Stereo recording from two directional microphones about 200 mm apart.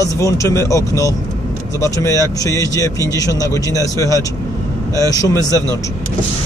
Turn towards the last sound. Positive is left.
turn(degrees=15)  # may be behind; listen again after turning